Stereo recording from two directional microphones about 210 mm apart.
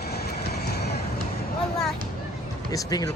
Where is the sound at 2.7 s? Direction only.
15° left (ahead or behind).